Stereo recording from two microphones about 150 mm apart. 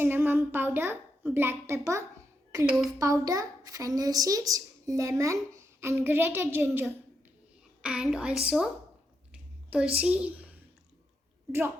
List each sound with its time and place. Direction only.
0.0 s a child's voice: 15° right (ahead or behind)
7.8 s a woman's voice: 5° right (ahead or behind)
9.3 s a sound: 5° right (ahead or behind)
10.0 s a child's voice: 10° right (ahead or behind)